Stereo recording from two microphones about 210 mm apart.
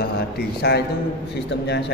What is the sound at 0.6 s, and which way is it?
A man's voice, 50° left (ahead or behind).